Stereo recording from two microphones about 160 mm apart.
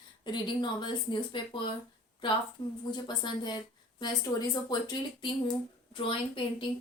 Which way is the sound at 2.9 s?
30° left (ahead or behind).